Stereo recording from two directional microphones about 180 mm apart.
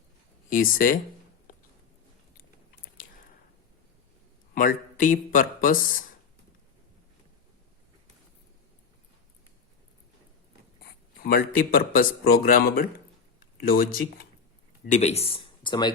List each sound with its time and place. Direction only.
0.5 s speech: 50° left (ahead or behind)
4.5 s speech: 50° left (ahead or behind)
11.2 s speech: 55° left (ahead or behind)
14.8 s speech: 40° left (ahead or behind)